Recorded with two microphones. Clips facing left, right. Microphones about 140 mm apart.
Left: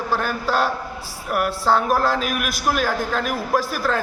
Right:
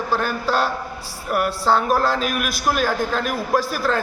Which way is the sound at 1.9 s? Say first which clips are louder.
Even; 10° left (ahead or behind).